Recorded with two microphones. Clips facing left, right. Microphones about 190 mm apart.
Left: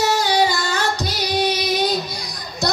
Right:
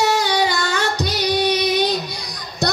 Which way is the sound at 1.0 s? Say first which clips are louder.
Right 2 dB; 65° right (ahead or behind).